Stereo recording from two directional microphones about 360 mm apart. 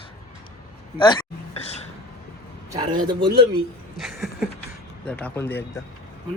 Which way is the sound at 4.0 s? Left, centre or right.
Centre.